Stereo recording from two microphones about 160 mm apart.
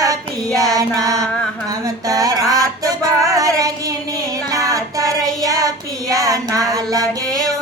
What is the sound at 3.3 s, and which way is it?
Child singing, 20° right (ahead or behind).